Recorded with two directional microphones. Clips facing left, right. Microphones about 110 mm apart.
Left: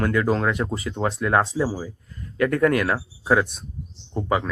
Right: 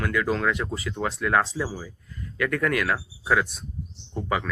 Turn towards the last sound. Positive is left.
turn(degrees=30)  # may be behind; listen again after turning